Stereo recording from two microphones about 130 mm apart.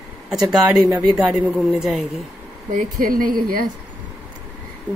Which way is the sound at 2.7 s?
90° right.